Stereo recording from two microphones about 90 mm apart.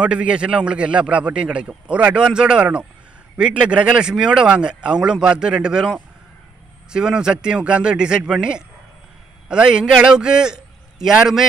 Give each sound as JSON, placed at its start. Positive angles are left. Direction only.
{"t": 0.0, "sound": "a man's voice", "side_deg": -10}